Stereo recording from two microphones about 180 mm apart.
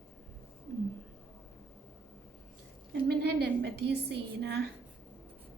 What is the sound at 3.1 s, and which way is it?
A woman's voice, 65° right (ahead or behind).